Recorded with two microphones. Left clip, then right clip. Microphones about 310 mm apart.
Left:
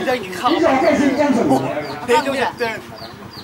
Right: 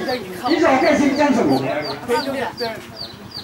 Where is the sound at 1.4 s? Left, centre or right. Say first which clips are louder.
Left 1 dB; centre.